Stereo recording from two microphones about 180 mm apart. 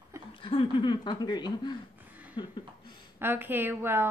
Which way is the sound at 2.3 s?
25° left (ahead or behind).